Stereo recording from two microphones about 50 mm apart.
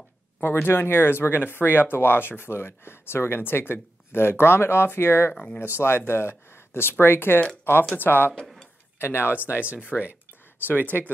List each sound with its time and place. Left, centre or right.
0.4 s speech: left
9.6 s speech: right
10.7 s speech: left